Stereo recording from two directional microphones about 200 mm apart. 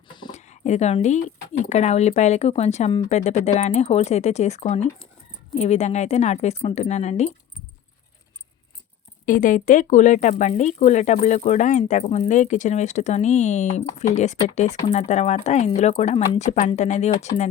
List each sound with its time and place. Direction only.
0.3 s a sound: 35° left (ahead or behind)
1.7 s speech: 35° left (ahead or behind)
9.2 s speech: 45° left (ahead or behind)